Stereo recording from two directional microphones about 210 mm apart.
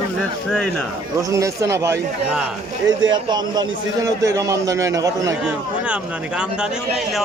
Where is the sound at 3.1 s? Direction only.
20° right (ahead or behind).